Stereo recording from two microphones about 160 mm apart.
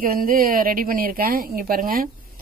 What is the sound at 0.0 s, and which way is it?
Speech, 60° right (ahead or behind).